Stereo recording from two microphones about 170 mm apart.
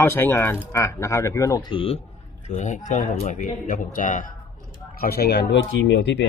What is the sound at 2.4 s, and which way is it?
A man's voice, 45° left (ahead or behind).